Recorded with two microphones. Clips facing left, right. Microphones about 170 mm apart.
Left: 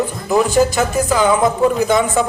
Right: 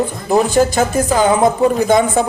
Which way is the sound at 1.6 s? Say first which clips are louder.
Right 1 dB; 20° right (ahead or behind).